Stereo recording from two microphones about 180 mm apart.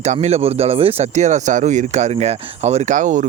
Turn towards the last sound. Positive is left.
turn(degrees=-45)  # may be behind; listen again after turning